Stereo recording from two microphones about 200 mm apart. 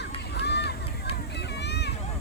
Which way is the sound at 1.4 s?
60° left (ahead or behind).